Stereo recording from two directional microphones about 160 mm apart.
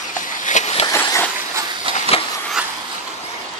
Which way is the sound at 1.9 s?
40° left (ahead or behind).